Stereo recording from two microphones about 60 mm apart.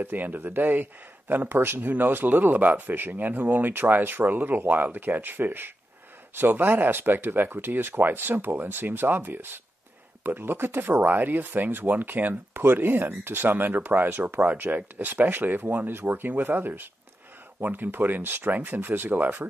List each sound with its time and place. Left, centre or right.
0.0 s speech: right